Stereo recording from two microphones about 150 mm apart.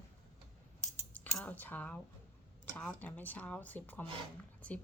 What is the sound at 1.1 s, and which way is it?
Speech, 10° left (ahead or behind).